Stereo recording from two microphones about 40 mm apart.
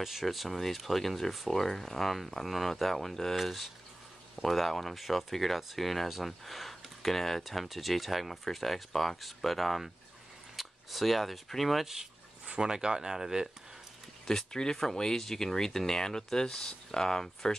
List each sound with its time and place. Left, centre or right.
0.0 s speech: centre
11.8 s speech: centre
14.2 s speech: centre